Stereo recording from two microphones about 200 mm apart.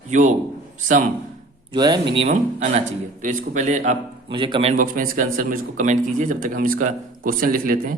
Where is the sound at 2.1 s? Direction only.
35° right (ahead or behind).